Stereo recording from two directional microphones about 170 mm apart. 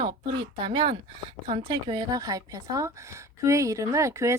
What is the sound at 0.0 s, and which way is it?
Speech, 25° right (ahead or behind).